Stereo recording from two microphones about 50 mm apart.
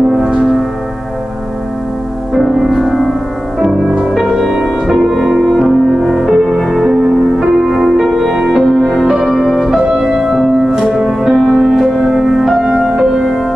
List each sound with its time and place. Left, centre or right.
2.3 s music: centre
3.6 s music: centre
4.1 s music: centre